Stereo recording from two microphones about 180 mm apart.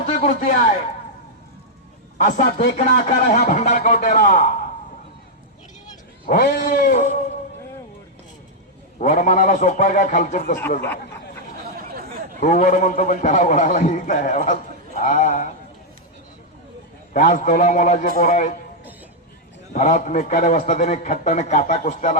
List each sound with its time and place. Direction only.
0.0 s a man's voice: 45° left (ahead or behind)
2.1 s a man's voice: 45° left (ahead or behind)
6.2 s a man's voice: 55° left (ahead or behind)
9.0 s a man's voice: 45° left (ahead or behind)
12.4 s a man's voice: 45° left (ahead or behind)
17.2 s a man's voice: 45° left (ahead or behind)
19.7 s a man's voice: 40° left (ahead or behind)